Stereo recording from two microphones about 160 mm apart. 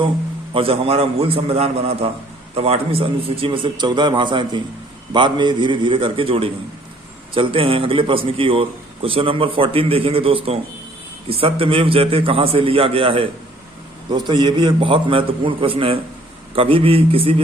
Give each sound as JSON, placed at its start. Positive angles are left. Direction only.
{"t": 0.5, "sound": "a man's voice", "side_deg": -35}